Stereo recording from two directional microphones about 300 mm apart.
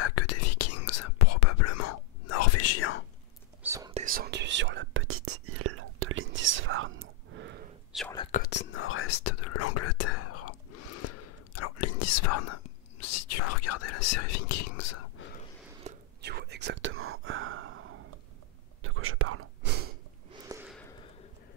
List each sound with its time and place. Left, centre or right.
0.0 s whispering: left
3.6 s whispering: centre
3.9 s whispering: right
7.9 s whispering: centre
8.3 s whispering: left
15.8 s whispering: right
16.2 s whispering: right
20.4 s a sound: centre